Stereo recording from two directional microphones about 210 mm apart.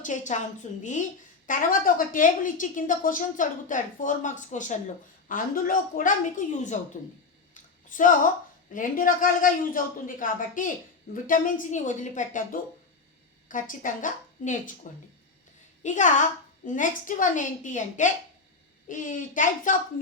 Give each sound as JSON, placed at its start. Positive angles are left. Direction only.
{"t": 0.0, "sound": "a woman's voice", "side_deg": 35}
{"t": 7.5, "sound": "a sound", "side_deg": 40}
{"t": 8.7, "sound": "a woman's voice", "side_deg": 40}
{"t": 15.8, "sound": "a woman's voice", "side_deg": 35}